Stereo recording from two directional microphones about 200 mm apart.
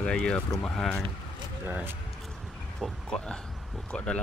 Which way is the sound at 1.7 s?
10° right (ahead or behind).